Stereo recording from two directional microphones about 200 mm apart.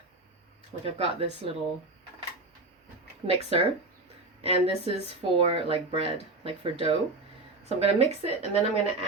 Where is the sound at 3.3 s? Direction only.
30° right (ahead or behind).